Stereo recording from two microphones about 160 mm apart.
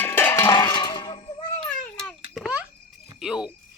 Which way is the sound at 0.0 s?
10° left (ahead or behind).